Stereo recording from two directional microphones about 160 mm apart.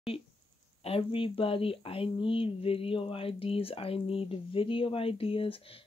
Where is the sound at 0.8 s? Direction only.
35° left (ahead or behind).